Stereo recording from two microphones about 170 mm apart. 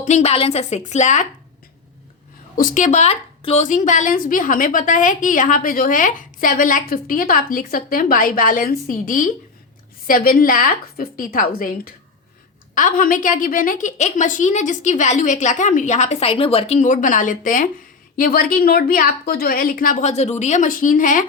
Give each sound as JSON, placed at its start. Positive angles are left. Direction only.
{"t": 0.0, "sound": "a woman's voice", "side_deg": 40}
{"t": 2.6, "sound": "a woman's voice", "side_deg": 50}